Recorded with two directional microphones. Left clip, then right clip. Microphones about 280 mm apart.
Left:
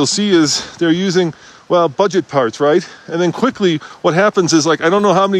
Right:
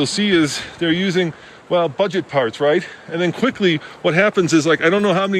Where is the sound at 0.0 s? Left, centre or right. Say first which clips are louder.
Left 4 dB; centre.